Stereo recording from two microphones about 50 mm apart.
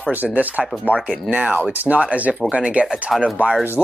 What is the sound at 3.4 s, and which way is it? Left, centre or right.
Speech, right.